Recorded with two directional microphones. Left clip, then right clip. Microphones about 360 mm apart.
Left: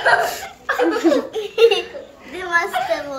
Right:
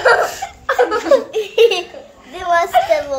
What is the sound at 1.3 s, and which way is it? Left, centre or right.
Giggle, right.